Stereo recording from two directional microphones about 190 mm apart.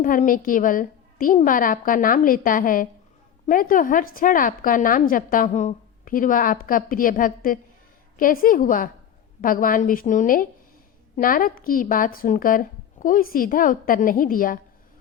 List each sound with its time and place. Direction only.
0.0 s a woman's voice: 45° left (ahead or behind)